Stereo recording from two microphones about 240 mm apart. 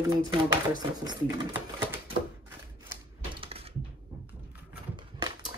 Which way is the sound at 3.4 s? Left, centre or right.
Right.